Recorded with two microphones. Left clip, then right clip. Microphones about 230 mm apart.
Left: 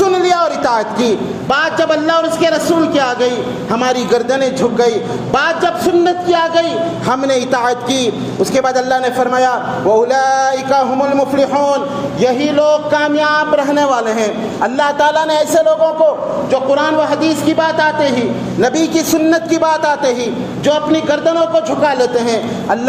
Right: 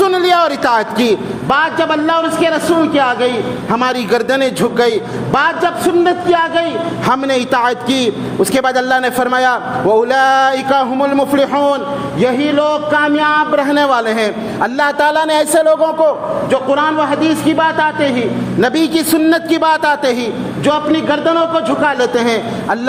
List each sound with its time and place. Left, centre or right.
0.0 s a sound: right
1.5 s a man's voice: right
16.5 s a man's voice: right
20.7 s a man's voice: right